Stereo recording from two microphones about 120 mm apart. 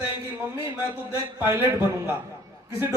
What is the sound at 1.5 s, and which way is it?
Speech, 20° right (ahead or behind).